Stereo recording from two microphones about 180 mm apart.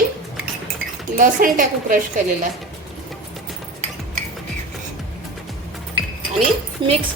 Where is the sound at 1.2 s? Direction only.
50° right (ahead or behind).